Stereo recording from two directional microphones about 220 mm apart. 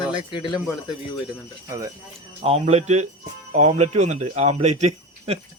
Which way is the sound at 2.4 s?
30° right (ahead or behind).